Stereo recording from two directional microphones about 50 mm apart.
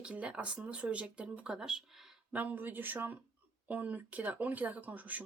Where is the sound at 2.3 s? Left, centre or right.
Right.